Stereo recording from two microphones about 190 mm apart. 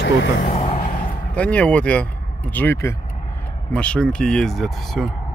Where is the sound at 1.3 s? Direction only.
5° left (ahead or behind).